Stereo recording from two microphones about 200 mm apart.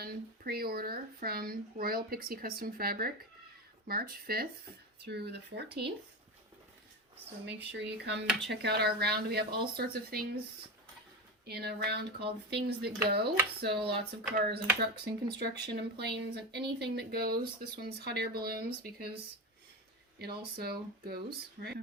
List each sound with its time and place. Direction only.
0.0 s speech: 50° right (ahead or behind)
7.4 s speech: 60° right (ahead or behind)
11.4 s speech: 55° right (ahead or behind)
20.1 s speech: 55° right (ahead or behind)